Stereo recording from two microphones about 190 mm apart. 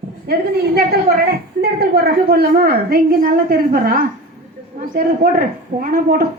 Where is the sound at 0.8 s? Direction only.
55° right (ahead or behind).